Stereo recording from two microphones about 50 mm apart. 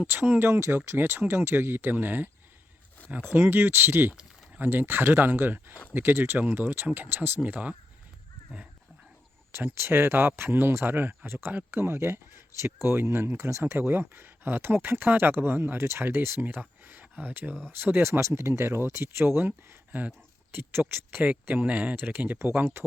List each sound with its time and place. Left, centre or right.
0.1 s speech: right
3.0 s a sound: left
3.3 s speech: right
6.4 s speech: right
9.5 s speech: right
13.7 s speech: right
16.8 s a sound: right
17.7 s speech: right
18.0 s speech: right
21.1 s speech: right
21.9 s speech: right